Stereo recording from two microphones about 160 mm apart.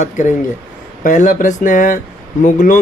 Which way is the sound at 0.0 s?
50° left (ahead or behind).